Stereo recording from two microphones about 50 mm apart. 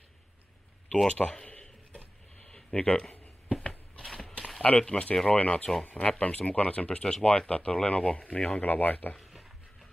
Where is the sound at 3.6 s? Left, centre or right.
Centre.